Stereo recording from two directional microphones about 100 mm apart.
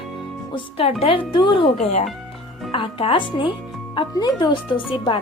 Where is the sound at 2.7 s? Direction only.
60° left (ahead or behind).